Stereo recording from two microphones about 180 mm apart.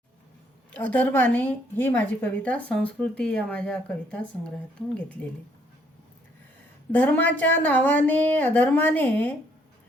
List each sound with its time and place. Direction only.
0.7 s speech: 10° left (ahead or behind)
6.9 s speech: 10° left (ahead or behind)